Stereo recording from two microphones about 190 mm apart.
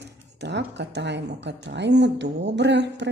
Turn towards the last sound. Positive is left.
turn(degrees=-65)  # may be behind; listen again after turning